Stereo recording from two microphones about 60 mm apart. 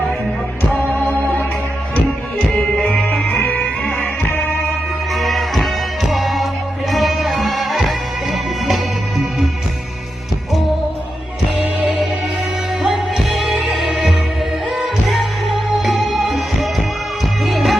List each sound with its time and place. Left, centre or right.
0.7 s music: left
2.8 s music: left
5.1 s music: centre
11.6 s music: right
12.8 s music: centre